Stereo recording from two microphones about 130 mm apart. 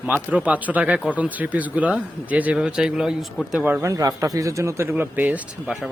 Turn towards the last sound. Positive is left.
turn(degrees=-10)  # may be behind; listen again after turning